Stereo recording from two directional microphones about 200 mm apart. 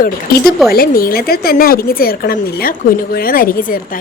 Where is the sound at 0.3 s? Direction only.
45° left (ahead or behind).